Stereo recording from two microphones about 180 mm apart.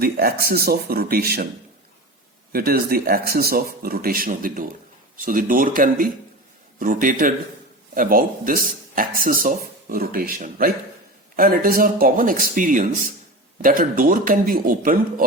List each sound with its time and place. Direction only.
0.0 s speech: 55° right (ahead or behind)
2.5 s speech: 55° right (ahead or behind)